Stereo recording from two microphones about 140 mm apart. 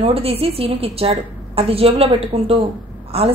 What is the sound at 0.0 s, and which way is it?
Speech, 45° right (ahead or behind).